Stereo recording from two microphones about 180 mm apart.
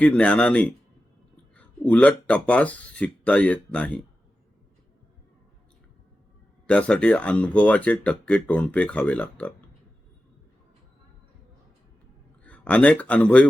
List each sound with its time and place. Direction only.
0.0 s speech: 5° left (ahead or behind)
6.7 s speech: 5° left (ahead or behind)
12.4 s speech: 5° left (ahead or behind)